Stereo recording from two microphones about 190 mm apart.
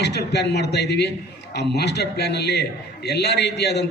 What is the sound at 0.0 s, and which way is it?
A man's voice, 60° left (ahead or behind).